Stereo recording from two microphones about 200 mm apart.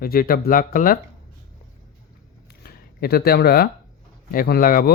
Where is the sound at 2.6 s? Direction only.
50° left (ahead or behind).